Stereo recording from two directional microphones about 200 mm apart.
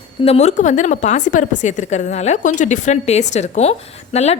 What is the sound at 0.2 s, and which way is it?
A woman's voice, 30° left (ahead or behind).